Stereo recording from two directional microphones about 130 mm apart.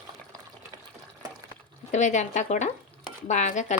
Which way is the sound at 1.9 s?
65° left (ahead or behind).